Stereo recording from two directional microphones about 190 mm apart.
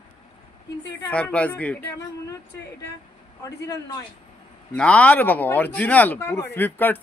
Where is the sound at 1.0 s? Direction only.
10° left (ahead or behind).